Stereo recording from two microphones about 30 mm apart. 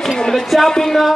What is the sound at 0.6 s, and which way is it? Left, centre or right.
Speech, centre.